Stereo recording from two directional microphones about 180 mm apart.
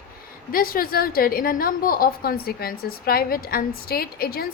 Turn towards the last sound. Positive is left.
turn(degrees=55)  # may be behind; listen again after turning